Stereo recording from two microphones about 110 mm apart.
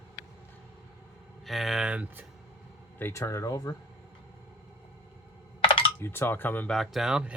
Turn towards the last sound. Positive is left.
turn(degrees=-5)  # may be behind; listen again after turning